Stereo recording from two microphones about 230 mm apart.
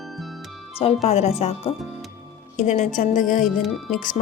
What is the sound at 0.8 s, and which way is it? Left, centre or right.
Speech, left.